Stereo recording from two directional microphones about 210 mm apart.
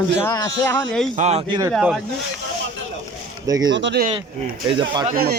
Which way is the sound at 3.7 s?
60° right (ahead or behind).